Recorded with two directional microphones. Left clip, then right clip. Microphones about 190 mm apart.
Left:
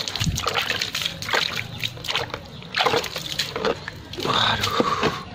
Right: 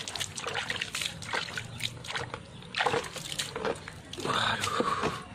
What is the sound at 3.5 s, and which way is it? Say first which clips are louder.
Pig: left 8 dB; 10° left (ahead or behind).